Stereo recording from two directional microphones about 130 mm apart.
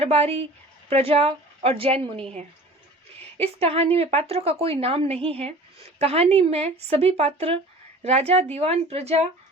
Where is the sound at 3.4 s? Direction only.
50° right (ahead or behind).